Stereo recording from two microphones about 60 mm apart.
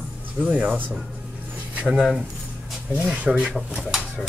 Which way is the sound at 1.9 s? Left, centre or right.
Centre.